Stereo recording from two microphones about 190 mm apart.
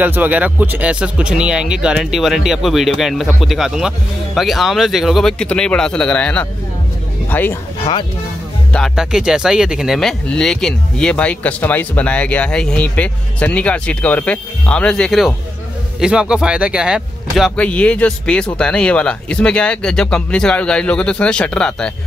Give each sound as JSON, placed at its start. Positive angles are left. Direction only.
{"t": 0.0, "sound": "speech", "side_deg": -10}
{"t": 8.7, "sound": "speech", "side_deg": 0}
{"t": 17.6, "sound": "speech", "side_deg": 5}